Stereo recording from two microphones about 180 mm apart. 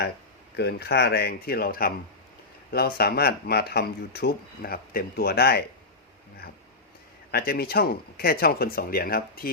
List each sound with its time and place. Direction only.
0.5 s speech: 65° left (ahead or behind)
7.3 s speech: 60° left (ahead or behind)